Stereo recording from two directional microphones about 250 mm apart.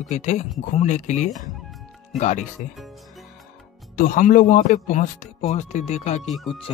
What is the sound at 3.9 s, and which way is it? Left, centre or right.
Speech, left.